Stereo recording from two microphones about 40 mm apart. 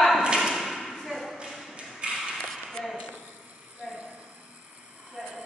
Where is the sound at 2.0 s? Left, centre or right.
Right.